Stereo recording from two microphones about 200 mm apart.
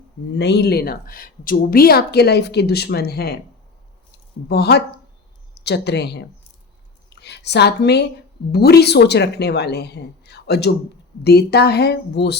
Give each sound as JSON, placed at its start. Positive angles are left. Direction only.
{"t": 0.3, "sound": "a woman's voice", "side_deg": 60}
{"t": 4.4, "sound": "a woman's voice", "side_deg": 55}
{"t": 7.1, "sound": "a sound", "side_deg": 55}
{"t": 8.5, "sound": "a woman's voice", "side_deg": 50}